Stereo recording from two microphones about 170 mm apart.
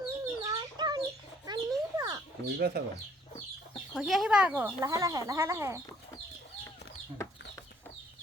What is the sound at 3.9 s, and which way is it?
Speech, centre (ahead or behind).